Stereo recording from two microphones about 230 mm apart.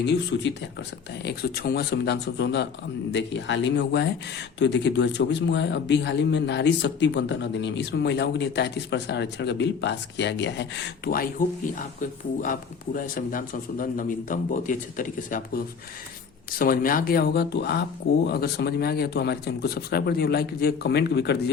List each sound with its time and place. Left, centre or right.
0.0 s a man's voice: left